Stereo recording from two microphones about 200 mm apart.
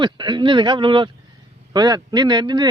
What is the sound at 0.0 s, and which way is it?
A man's voice, 25° right (ahead or behind).